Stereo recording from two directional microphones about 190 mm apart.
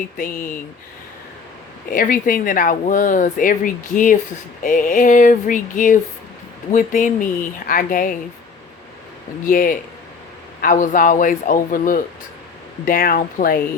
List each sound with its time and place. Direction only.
1.9 s speech: 45° left (ahead or behind)
9.5 s speech: 45° left (ahead or behind)